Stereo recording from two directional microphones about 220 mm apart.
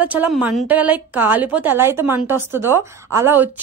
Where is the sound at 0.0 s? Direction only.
5° right (ahead or behind).